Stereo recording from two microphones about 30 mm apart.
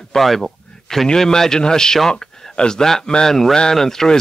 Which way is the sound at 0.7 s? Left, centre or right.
Centre.